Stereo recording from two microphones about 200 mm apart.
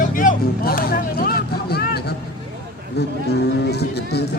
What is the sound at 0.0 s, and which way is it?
Vehicle, 40° left (ahead or behind).